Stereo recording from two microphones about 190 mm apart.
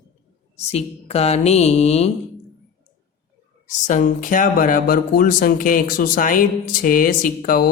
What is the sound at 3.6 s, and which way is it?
Speech, 45° left (ahead or behind).